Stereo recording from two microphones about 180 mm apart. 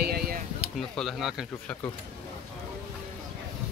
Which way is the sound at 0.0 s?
60° right (ahead or behind).